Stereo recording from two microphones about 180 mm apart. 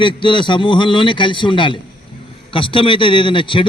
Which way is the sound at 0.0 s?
30° left (ahead or behind).